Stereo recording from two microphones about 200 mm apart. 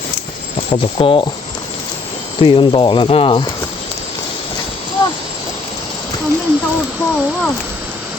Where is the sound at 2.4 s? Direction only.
25° left (ahead or behind).